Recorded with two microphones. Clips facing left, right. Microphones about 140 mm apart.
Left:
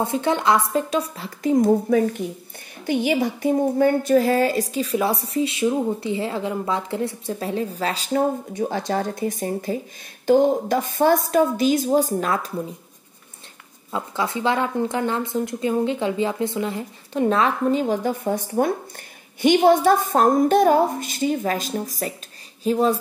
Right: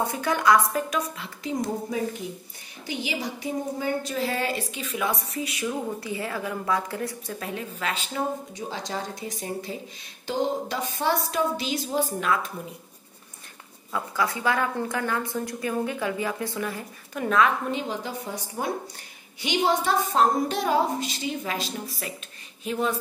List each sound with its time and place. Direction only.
0.0 s a woman's voice: 25° left (ahead or behind)
8.5 s a woman's voice: 55° left (ahead or behind); by 12.5 s 35° left (ahead or behind)
13.9 s a woman's voice: 25° left (ahead or behind)